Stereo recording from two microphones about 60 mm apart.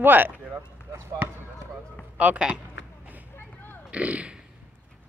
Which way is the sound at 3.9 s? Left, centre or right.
Right.